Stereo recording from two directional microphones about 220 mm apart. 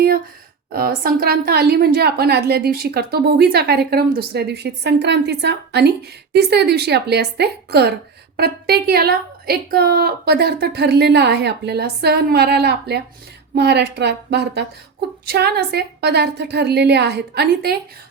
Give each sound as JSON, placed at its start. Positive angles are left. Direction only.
{"t": 0.7, "sound": "a woman's voice", "side_deg": -40}